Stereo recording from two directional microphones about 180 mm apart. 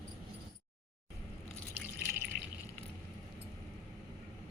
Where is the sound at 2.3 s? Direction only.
60° right (ahead or behind).